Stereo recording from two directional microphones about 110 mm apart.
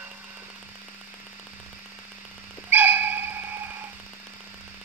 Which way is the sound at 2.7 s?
15° right (ahead or behind).